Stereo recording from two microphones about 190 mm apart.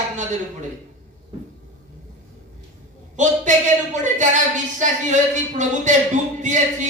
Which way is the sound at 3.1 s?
40° right (ahead or behind).